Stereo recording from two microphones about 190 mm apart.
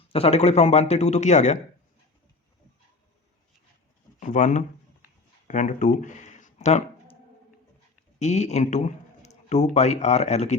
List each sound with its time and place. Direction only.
0.1 s speech: 30° left (ahead or behind)
4.2 s speech: 40° left (ahead or behind)
5.5 s a sound: 40° left (ahead or behind)
8.2 s a man's voice: 35° left (ahead or behind)